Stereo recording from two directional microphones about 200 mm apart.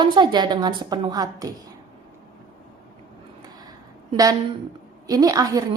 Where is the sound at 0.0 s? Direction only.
20° right (ahead or behind).